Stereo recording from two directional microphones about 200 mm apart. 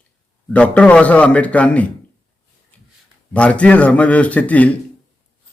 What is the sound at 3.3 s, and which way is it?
Speech, 5° left (ahead or behind).